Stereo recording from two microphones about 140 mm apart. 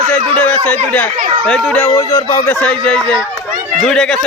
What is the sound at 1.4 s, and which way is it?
Speech, 5° left (ahead or behind).